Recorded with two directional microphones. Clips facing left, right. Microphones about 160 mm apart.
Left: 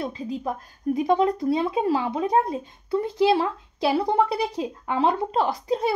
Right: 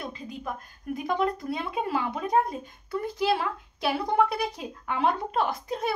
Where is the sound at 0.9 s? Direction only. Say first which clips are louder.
Left 6 dB; 30° left (ahead or behind).